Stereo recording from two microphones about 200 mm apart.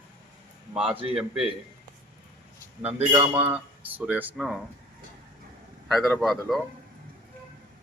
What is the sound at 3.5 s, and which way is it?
Speech, 5° right (ahead or behind).